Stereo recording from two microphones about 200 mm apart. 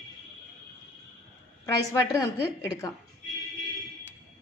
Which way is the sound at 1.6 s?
15° left (ahead or behind).